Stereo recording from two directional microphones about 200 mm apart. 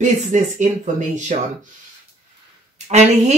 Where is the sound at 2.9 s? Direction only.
35° right (ahead or behind).